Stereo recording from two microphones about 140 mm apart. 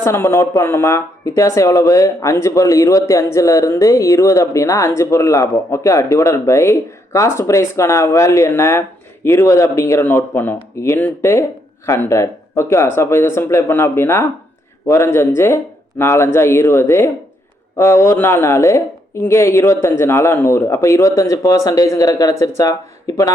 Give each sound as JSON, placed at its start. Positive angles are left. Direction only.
{"t": 0.0, "sound": "speech", "side_deg": 20}